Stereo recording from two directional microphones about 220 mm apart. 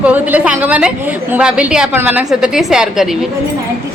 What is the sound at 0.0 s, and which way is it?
A woman's voice, 5° right (ahead or behind).